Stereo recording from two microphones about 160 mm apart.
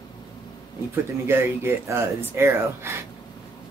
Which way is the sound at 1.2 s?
15° right (ahead or behind).